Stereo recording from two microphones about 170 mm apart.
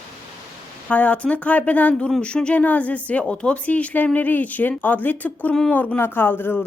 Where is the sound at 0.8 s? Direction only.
10° left (ahead or behind).